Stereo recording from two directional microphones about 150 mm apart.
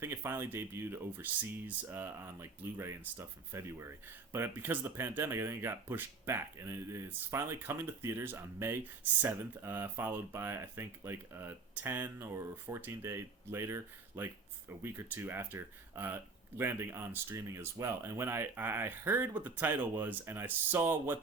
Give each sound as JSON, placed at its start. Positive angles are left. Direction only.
{"t": 0.0, "sound": "speech", "side_deg": -15}